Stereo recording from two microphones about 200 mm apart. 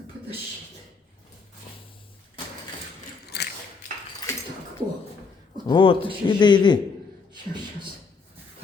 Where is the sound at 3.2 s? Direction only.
55° left (ahead or behind).